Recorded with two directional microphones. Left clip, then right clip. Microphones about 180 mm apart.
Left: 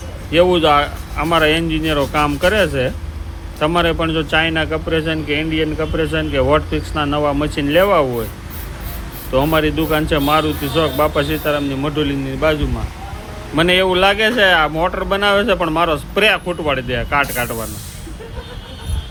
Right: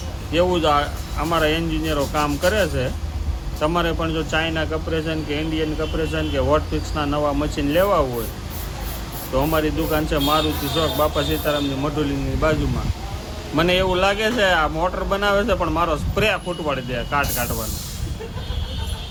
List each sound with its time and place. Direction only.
0.3 s speech: 30° left (ahead or behind)
9.3 s speech: 30° left (ahead or behind)
13.6 s speech: 20° left (ahead or behind)